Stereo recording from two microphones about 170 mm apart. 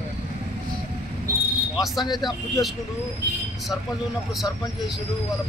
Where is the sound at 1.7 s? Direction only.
Centre (ahead or behind).